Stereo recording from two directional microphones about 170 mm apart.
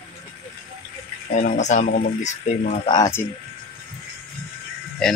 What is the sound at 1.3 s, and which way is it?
Speech, 45° left (ahead or behind).